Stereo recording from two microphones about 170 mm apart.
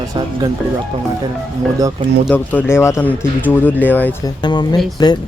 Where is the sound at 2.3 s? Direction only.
10° left (ahead or behind).